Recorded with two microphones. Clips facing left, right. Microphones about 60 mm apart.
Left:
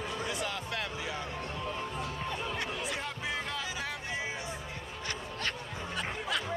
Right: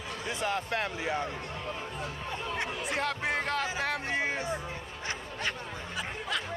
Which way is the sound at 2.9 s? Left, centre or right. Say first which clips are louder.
Right 5 dB; right.